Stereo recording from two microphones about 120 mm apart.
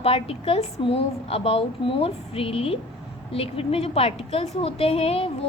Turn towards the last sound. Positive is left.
turn(degrees=55)  # may be behind; listen again after turning